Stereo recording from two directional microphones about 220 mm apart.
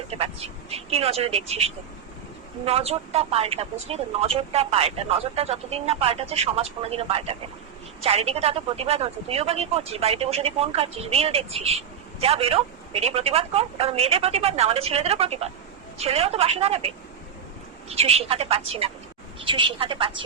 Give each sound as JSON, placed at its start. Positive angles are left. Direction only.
{"t": 0.1, "sound": "speech", "side_deg": -25}